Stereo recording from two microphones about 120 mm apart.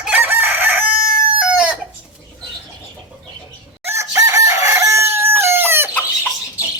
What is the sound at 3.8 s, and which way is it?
Chicken, 25° right (ahead or behind).